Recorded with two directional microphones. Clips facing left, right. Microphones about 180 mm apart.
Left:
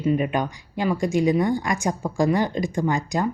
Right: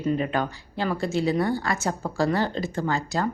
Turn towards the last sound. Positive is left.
turn(degrees=15)  # may be behind; listen again after turning